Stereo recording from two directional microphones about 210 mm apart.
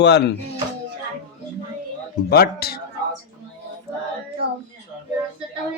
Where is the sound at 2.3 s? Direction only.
50° left (ahead or behind).